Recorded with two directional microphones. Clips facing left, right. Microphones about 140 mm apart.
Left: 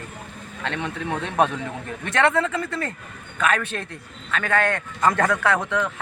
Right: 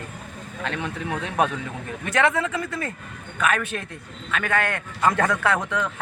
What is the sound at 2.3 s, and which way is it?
Speech, 15° right (ahead or behind).